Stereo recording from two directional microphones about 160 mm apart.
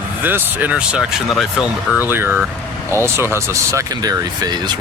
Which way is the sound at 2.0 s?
15° right (ahead or behind).